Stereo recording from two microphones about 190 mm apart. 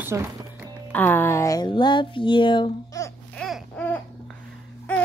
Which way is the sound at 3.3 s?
Centre (ahead or behind).